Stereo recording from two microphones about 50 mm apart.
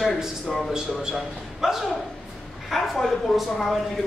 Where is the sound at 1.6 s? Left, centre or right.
Centre.